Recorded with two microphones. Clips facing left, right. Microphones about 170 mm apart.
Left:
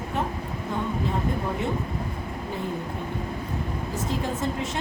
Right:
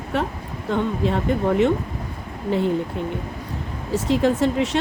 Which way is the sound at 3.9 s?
80° right.